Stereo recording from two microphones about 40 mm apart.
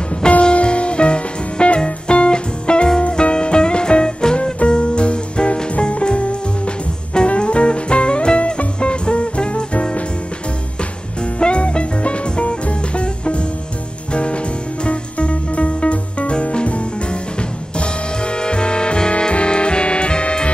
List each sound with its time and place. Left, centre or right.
0.3 s music: left
11.3 s music: left